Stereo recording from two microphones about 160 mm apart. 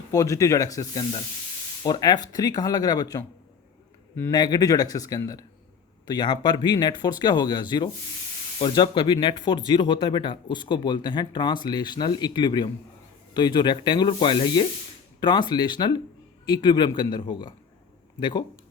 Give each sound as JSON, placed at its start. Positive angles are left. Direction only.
{"t": 0.1, "sound": "speech", "side_deg": 20}